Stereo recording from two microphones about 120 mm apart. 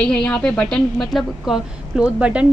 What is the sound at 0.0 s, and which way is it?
A woman's voice, 10° left (ahead or behind).